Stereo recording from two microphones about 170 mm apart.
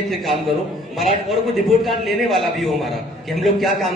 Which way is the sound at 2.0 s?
Centre (ahead or behind).